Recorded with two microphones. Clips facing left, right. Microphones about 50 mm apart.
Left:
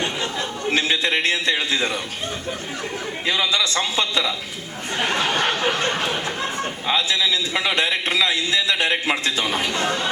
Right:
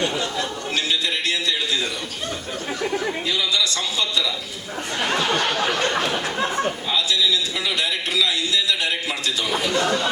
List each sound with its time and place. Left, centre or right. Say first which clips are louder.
0.0 s a sound: right 1 dB; left
3.2 s a man's voice: left 6 dB; left
6.8 s a man's voice: left 5 dB; left